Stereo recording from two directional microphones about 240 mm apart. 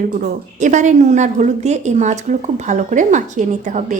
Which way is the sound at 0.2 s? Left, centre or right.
Right.